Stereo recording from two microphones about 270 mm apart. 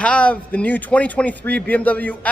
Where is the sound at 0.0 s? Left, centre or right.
Centre.